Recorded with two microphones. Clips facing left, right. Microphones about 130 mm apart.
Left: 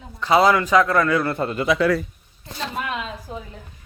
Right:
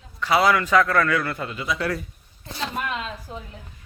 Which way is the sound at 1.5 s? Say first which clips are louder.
Left 9 dB; 65° left (ahead or behind).